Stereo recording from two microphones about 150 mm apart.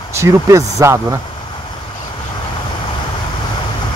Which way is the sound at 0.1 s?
20° right (ahead or behind).